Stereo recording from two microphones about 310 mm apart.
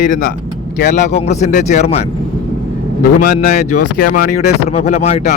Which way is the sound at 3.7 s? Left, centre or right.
Left.